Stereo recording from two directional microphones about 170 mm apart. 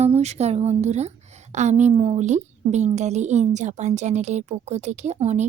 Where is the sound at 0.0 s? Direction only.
40° right (ahead or behind).